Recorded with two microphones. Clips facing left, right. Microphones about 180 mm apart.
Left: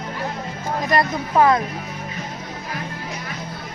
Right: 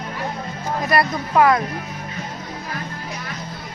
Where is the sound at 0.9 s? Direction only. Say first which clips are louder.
Right 1 dB; 25° left (ahead or behind).